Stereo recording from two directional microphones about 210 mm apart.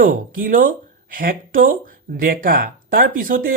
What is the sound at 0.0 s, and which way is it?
Speech, 40° right (ahead or behind).